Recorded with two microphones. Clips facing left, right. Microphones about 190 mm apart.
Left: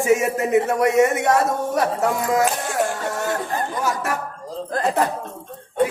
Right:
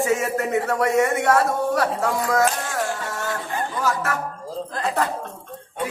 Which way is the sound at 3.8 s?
20° left (ahead or behind).